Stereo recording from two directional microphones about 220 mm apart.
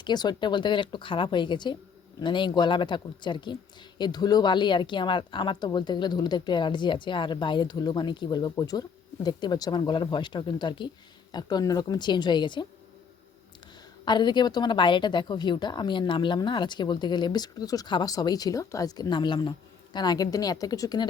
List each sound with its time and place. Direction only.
0.0 s a woman's voice: 20° left (ahead or behind)
14.0 s a woman's voice: 20° left (ahead or behind)